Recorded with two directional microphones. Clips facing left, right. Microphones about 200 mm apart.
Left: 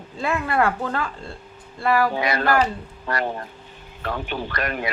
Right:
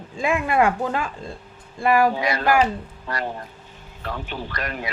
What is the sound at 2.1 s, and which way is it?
Speech, 60° left (ahead or behind).